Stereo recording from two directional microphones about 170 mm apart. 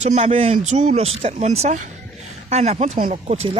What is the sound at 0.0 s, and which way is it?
Speech, 40° right (ahead or behind).